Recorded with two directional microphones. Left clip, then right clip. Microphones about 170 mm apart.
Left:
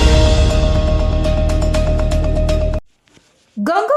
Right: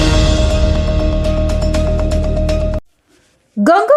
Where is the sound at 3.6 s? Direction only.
25° right (ahead or behind).